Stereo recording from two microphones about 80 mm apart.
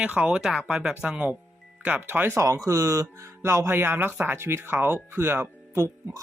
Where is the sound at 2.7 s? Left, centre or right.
Right.